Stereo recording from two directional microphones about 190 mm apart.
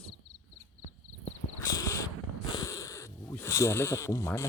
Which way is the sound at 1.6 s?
15° left (ahead or behind).